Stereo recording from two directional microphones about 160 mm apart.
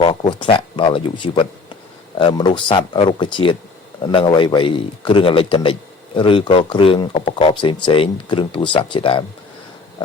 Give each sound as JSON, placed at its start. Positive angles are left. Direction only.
{"t": 0.0, "sound": "speech", "side_deg": 30}